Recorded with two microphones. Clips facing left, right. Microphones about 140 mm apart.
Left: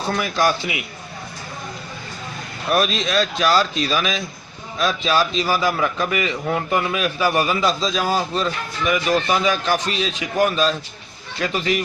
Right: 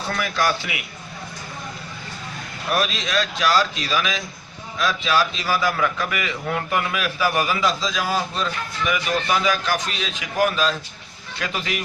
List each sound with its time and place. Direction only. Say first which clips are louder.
0.1 s a man's voice: left 3 dB; 25° left (ahead or behind)
2.8 s a man's voice: left 4 dB; 30° left (ahead or behind)